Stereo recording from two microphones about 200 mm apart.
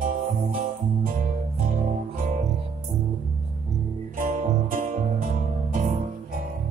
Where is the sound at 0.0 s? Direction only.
45° right (ahead or behind).